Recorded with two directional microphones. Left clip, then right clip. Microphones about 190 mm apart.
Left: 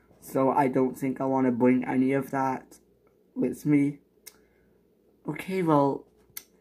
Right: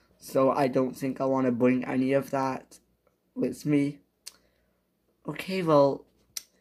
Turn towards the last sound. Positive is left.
turn(degrees=-35)  # may be behind; listen again after turning